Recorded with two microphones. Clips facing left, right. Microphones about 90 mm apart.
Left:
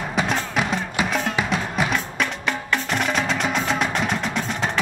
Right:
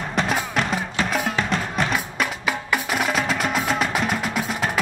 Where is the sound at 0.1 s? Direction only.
5° left (ahead or behind).